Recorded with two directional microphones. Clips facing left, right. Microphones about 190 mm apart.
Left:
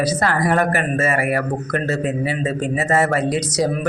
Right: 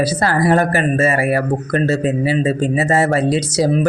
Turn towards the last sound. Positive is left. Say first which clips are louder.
# right 4 dB
turn(degrees=-30)  # may be behind; listen again after turning